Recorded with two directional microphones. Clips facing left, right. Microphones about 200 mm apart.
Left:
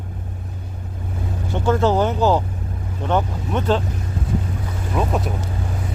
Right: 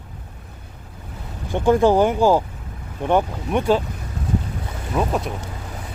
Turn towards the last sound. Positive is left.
turn(degrees=0)  # may be behind; listen again after turning